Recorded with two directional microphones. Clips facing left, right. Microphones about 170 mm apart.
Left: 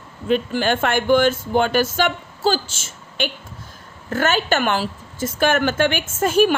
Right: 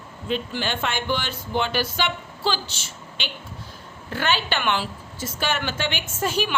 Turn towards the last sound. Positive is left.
turn(degrees=50)  # may be behind; listen again after turning